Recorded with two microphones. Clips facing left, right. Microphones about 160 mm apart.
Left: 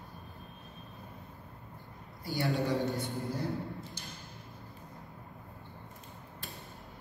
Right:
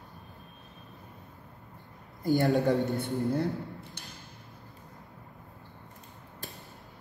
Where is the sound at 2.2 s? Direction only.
50° right (ahead or behind).